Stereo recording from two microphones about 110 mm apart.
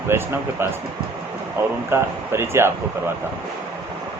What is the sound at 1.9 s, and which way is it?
Speech, 20° right (ahead or behind).